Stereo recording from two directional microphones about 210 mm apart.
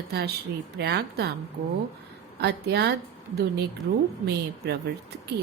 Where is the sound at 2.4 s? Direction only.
50° right (ahead or behind).